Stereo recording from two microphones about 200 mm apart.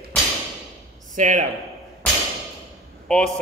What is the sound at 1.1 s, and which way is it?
Speech, 35° right (ahead or behind).